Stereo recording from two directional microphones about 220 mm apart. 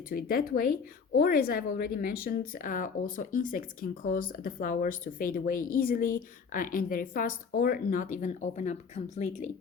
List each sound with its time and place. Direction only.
0.1 s speech: 40° left (ahead or behind)